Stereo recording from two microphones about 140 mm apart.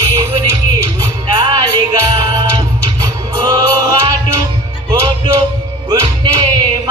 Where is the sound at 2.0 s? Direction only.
25° right (ahead or behind).